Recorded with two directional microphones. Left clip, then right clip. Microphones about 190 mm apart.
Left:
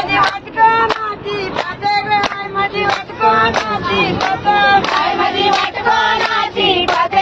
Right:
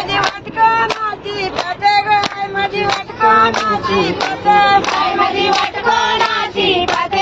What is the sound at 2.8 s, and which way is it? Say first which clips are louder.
Music: right 1 dB; 60° right (ahead or behind).